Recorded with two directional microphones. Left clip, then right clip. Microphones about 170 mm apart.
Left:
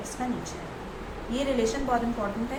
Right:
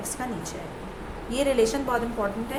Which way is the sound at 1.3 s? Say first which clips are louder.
Right 4 dB; 90° right.